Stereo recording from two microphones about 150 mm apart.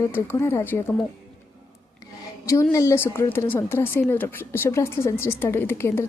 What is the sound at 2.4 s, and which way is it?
A woman's voice, 20° left (ahead or behind).